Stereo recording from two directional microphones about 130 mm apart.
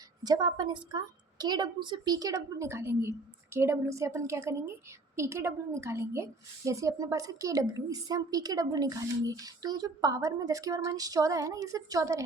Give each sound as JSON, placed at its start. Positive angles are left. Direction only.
{"t": 0.2, "sound": "a woman's voice", "side_deg": -30}